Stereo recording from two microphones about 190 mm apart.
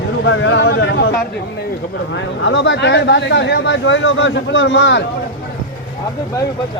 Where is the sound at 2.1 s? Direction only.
80° left.